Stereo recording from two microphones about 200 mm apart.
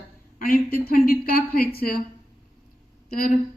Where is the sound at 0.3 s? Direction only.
45° left (ahead or behind).